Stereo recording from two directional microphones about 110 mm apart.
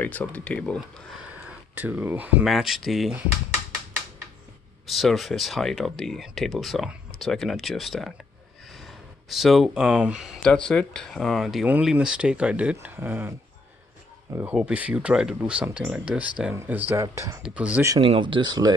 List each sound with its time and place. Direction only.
0.0 s speech: 15° left (ahead or behind)
1.8 s speech: 15° right (ahead or behind)
2.4 s speech: centre (ahead or behind)
4.8 s speech: centre (ahead or behind)
10.4 s speech: 5° left (ahead or behind); by 13.4 s 20° right (ahead or behind)
14.4 s speech: 10° right (ahead or behind)
16.9 s speech: 25° right (ahead or behind)
17.4 s speech: 10° right (ahead or behind)
18.0 s speech: 50° right (ahead or behind)